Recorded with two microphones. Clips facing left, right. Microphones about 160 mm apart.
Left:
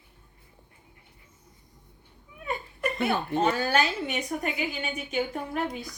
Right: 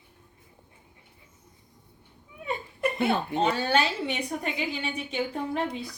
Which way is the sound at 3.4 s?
30° right (ahead or behind).